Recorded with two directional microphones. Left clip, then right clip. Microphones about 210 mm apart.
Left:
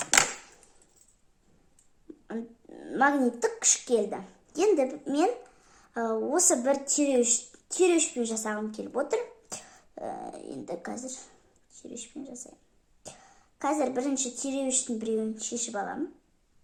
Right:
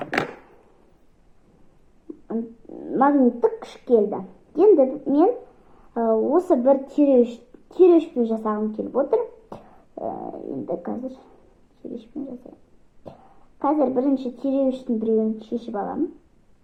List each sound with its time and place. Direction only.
2.2 s a sound: 35° left (ahead or behind)
4.8 s a woman's voice: 45° left (ahead or behind)
6.8 s a woman's voice: 55° left (ahead or behind)
8.1 s speech: 35° left (ahead or behind)
12.1 s speech: 40° left (ahead or behind)
13.6 s a woman's voice: 45° left (ahead or behind)